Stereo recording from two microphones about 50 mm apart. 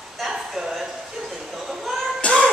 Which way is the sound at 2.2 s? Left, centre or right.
Left.